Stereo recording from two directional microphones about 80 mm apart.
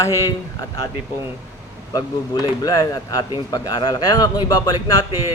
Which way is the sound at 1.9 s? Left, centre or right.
Left.